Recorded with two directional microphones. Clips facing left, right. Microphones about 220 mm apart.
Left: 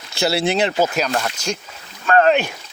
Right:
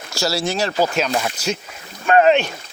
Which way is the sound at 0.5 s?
20° left (ahead or behind).